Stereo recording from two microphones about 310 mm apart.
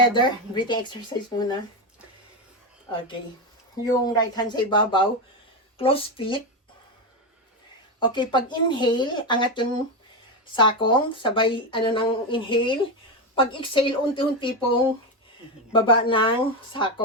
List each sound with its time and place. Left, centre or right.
0.1 s speech: centre
2.9 s speech: centre
7.9 s speech: centre